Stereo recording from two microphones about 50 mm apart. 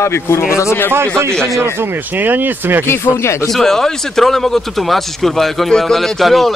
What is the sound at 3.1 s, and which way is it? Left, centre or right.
Speech, left.